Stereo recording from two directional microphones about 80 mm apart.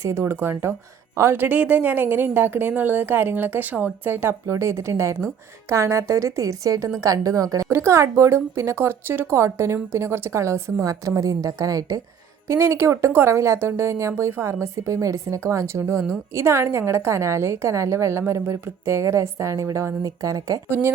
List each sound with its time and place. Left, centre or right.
0.0 s a woman's voice: right
7.7 s a woman's voice: right
12.5 s a woman's voice: right
20.7 s a woman's voice: right